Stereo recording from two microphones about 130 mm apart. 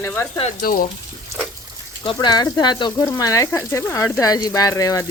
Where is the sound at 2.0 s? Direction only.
35° left (ahead or behind).